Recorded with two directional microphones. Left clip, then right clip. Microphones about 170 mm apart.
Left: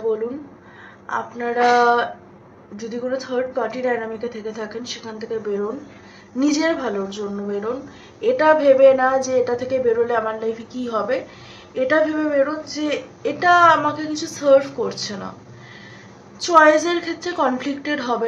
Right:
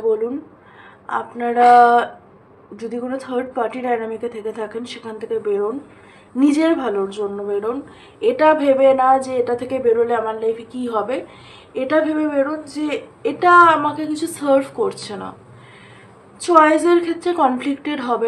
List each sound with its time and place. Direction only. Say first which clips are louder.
1.0 s a woman's voice: right 2 dB; 25° right (ahead or behind)
16.3 s a woman's voice: even; 20° right (ahead or behind)